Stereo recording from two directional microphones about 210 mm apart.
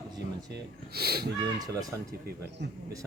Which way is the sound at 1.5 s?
20° right (ahead or behind).